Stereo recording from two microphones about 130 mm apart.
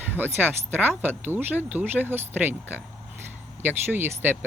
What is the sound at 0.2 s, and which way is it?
Speech, 15° right (ahead or behind).